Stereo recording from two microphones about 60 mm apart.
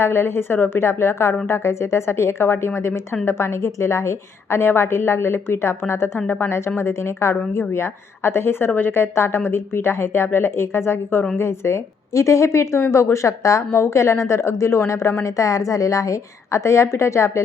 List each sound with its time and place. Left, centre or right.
0.0 s a woman's voice: left
6.1 s a woman's voice: left
6.5 s a woman's voice: left